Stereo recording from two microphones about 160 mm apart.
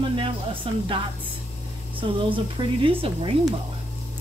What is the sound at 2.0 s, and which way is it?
Speech, 30° right (ahead or behind).